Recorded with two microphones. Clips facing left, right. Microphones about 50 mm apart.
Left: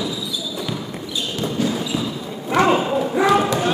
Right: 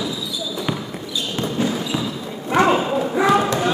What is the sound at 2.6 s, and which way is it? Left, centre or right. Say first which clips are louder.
Children playing: left 1 dB; centre.